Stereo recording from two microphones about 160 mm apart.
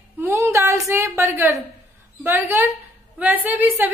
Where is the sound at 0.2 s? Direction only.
15° right (ahead or behind).